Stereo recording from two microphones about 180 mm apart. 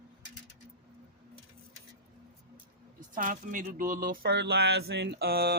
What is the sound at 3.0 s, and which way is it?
Speech, 50° right (ahead or behind).